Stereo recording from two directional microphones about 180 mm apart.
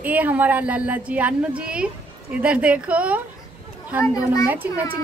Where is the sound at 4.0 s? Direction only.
20° left (ahead or behind).